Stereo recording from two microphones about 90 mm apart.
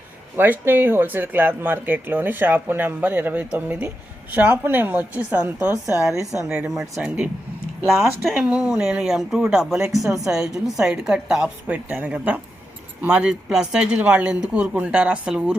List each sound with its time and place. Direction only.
0.3 s speech: 20° right (ahead or behind); by 8.4 s centre (ahead or behind)
8.4 s speech: 15° right (ahead or behind)